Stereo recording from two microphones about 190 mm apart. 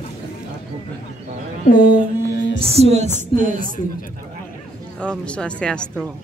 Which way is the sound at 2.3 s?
70° left (ahead or behind).